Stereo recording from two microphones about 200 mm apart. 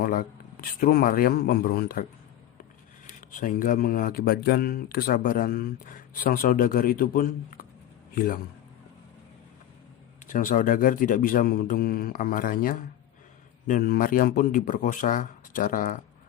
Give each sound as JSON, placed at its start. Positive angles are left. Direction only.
{"t": 0.0, "sound": "speech", "side_deg": 45}
{"t": 3.1, "sound": "a man's voice", "side_deg": 40}
{"t": 10.2, "sound": "speech", "side_deg": 40}